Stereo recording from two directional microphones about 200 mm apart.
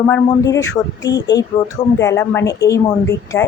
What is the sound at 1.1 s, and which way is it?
Speech, 60° left (ahead or behind).